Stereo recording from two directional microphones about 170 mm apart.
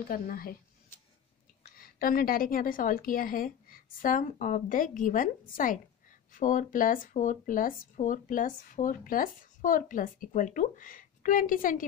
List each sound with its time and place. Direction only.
0.1 s a woman's voice: 60° left (ahead or behind)
1.8 s a woman's voice: 60° left (ahead or behind)